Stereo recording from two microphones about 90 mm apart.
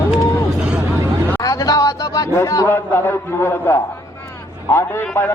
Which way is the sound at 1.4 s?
40° left (ahead or behind).